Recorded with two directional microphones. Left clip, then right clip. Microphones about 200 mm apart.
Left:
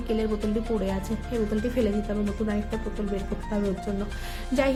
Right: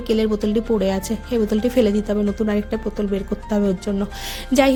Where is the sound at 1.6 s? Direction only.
50° right (ahead or behind).